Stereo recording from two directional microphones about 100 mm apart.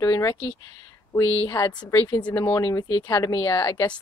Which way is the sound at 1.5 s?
35° left (ahead or behind).